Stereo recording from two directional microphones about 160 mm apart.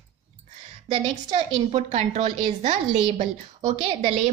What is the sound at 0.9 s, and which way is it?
A woman's voice, 30° right (ahead or behind).